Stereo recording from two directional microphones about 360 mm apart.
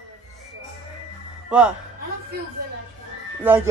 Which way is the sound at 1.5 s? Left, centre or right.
Centre.